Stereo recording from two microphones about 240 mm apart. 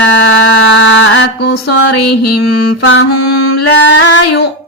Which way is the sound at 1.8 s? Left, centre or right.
Left.